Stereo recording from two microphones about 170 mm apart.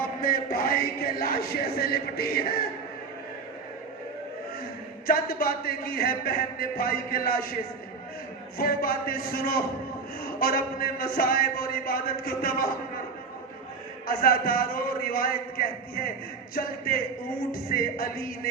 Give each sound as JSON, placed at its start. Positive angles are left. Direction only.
{"t": 0.2, "sound": "speech", "side_deg": 55}
{"t": 5.0, "sound": "speech", "side_deg": 60}
{"t": 8.5, "sound": "speech", "side_deg": 60}
{"t": 14.1, "sound": "speech", "side_deg": 60}